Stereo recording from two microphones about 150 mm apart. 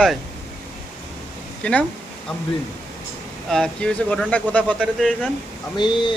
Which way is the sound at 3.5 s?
5° left (ahead or behind).